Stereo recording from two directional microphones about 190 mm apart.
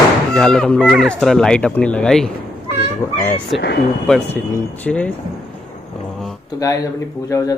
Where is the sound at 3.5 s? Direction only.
60° left (ahead or behind).